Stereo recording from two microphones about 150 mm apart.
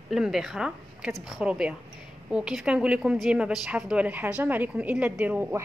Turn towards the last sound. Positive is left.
turn(degrees=-10)  # may be behind; listen again after turning